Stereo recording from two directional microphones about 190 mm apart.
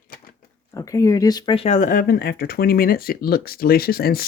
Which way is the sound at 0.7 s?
15° left (ahead or behind).